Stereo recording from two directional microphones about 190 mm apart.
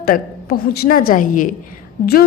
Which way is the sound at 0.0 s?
50° left (ahead or behind).